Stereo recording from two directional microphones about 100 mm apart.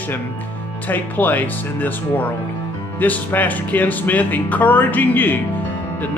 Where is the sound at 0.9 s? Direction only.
15° left (ahead or behind).